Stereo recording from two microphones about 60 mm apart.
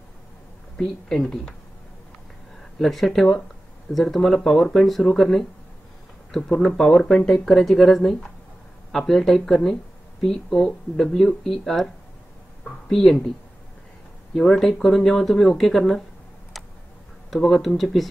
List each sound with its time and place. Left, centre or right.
0.7 s speech: centre
2.8 s speech: centre
12.9 s speech: centre
14.4 s speech: centre
17.3 s speech: centre